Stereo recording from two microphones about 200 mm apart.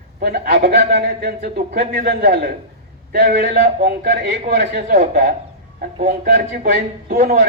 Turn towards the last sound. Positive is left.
turn(degrees=-40)  # may be behind; listen again after turning